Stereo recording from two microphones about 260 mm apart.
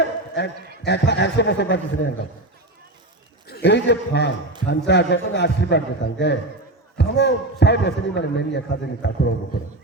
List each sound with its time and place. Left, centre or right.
0.4 s a man's voice: left
3.5 s a man's voice: left